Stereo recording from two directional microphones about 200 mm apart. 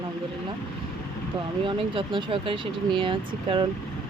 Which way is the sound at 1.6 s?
25° right (ahead or behind).